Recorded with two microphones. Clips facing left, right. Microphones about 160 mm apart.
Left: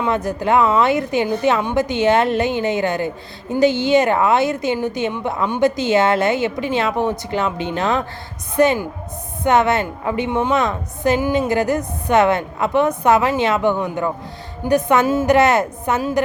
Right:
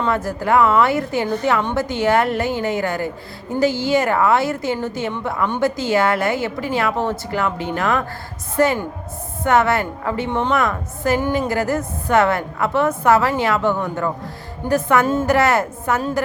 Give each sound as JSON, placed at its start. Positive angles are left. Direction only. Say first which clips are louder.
{"t": 0.0, "sound": "a woman's voice", "louder": "left 1 dB", "side_deg": 20}
{"t": 15.3, "sound": "a woman's voice", "louder": "left 2 dB", "side_deg": 20}